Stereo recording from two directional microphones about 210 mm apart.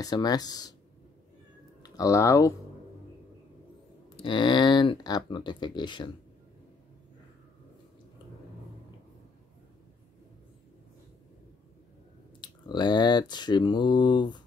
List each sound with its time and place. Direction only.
0.0 s speech: 20° left (ahead or behind)
1.8 s speech: 15° left (ahead or behind)
4.2 s speech: 25° left (ahead or behind)
12.4 s speech: 20° left (ahead or behind)